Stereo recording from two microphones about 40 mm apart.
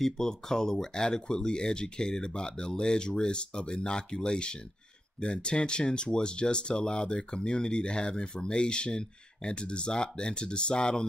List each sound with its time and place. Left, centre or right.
0.0 s speech: centre